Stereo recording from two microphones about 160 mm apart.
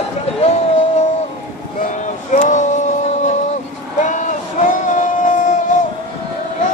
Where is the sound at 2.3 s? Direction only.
50° left (ahead or behind).